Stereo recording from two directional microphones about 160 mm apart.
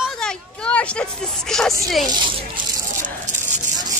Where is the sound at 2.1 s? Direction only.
30° right (ahead or behind).